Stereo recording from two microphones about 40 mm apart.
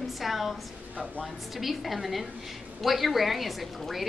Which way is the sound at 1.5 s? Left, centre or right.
Centre.